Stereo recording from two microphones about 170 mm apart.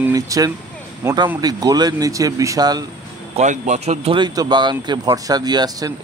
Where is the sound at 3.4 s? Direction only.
45° right (ahead or behind).